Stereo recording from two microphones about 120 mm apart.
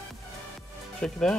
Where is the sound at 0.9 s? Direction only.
5° left (ahead or behind).